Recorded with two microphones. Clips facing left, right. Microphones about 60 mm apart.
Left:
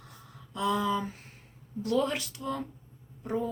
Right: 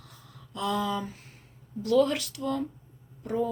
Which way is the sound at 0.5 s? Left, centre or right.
Left.